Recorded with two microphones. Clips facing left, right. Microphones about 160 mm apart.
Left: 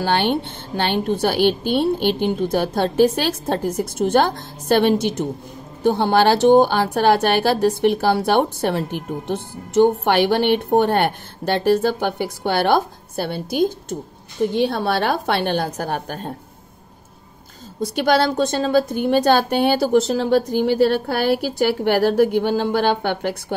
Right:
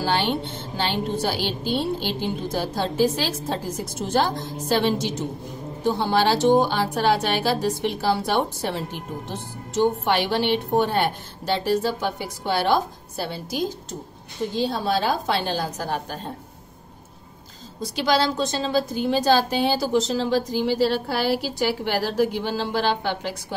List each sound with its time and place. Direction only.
0.0 s a woman's voice: 60° left (ahead or behind)
17.9 s a woman's voice: 55° left (ahead or behind)